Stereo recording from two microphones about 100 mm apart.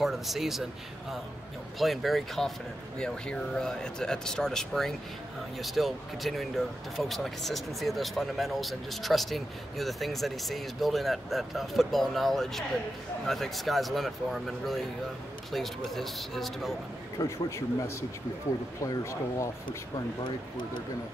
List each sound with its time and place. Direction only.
0.0 s speech: centre (ahead or behind)
1.8 s speech: centre (ahead or behind)
17.2 s a man's voice: 30° left (ahead or behind)